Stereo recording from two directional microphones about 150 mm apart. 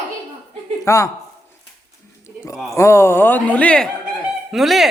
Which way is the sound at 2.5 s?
Centre (ahead or behind).